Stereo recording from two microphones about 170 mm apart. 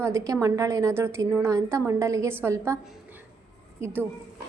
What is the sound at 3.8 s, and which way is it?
Speech, 15° right (ahead or behind).